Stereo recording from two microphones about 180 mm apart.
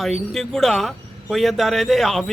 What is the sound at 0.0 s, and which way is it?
Speech, centre (ahead or behind).